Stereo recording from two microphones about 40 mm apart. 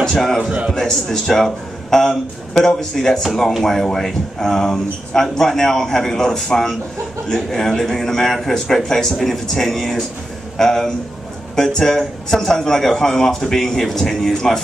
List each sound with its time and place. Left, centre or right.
0.1 s speech: centre